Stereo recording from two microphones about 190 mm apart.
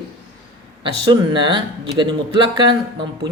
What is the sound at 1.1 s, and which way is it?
Speech, 25° right (ahead or behind).